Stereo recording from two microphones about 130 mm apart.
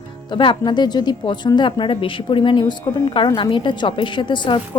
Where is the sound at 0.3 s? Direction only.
40° left (ahead or behind).